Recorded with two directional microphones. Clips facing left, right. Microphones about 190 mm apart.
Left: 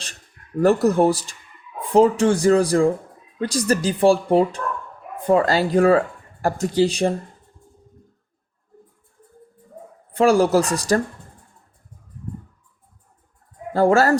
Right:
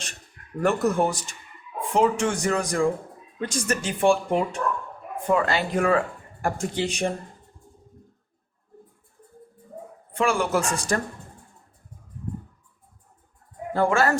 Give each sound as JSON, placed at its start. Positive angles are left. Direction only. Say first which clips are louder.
{"t": 0.6, "sound": "speech", "louder": "left 6 dB", "side_deg": 35}
{"t": 10.1, "sound": "speech", "louder": "left 8 dB", "side_deg": 35}
{"t": 13.7, "sound": "speech", "louder": "left 6 dB", "side_deg": 40}